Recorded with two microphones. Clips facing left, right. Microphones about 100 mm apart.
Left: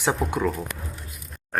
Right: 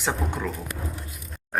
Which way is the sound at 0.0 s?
15° left (ahead or behind).